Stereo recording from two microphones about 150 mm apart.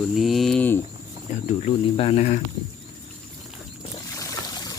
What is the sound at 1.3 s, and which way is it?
Speech, 55° left (ahead or behind).